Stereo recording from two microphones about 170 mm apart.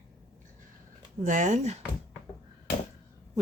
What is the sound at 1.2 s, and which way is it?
Speech, 50° right (ahead or behind).